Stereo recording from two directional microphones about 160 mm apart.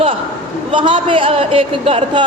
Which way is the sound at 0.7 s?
30° right (ahead or behind).